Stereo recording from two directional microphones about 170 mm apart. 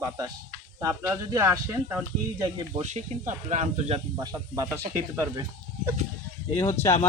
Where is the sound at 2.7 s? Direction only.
45° right (ahead or behind).